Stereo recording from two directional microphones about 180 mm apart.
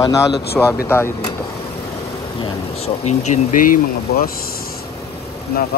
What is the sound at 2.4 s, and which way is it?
Speech, 35° left (ahead or behind).